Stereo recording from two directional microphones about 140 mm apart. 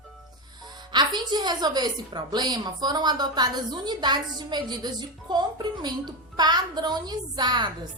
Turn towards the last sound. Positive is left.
turn(degrees=-30)  # may be behind; listen again after turning